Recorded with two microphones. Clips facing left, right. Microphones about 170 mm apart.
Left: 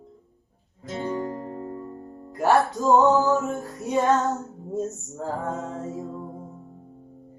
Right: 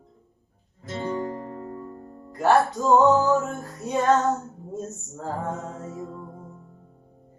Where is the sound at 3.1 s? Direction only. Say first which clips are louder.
Even; 20° left (ahead or behind).